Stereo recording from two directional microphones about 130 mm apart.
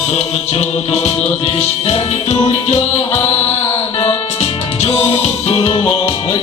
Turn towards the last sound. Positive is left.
turn(degrees=45)  # may be behind; listen again after turning